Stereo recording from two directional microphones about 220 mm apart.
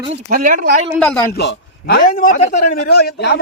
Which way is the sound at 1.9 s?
40° left (ahead or behind).